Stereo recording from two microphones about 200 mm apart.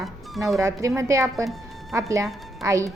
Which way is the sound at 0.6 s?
15° right (ahead or behind).